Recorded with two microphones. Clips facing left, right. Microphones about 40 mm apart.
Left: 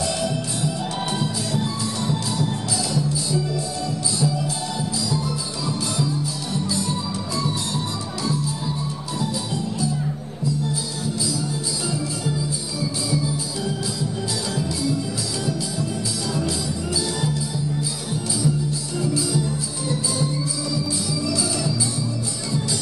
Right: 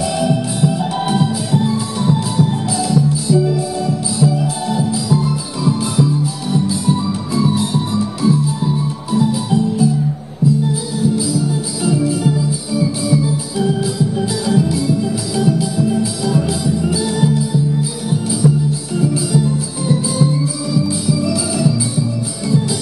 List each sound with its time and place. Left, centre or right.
0.0 s music: centre
18.4 s music: right
18.9 s music: centre